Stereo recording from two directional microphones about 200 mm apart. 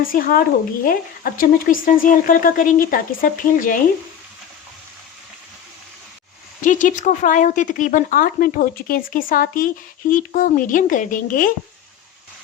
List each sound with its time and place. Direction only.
0.1 s speech: 45° left (ahead or behind)
6.6 s speech: 40° left (ahead or behind)